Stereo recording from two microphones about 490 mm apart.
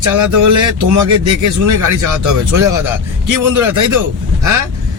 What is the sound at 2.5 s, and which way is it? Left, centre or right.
Speech, centre.